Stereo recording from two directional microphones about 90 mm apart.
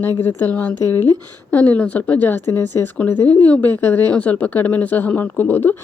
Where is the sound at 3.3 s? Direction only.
15° left (ahead or behind).